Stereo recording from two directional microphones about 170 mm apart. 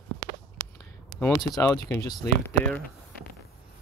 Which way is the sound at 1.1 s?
90° right.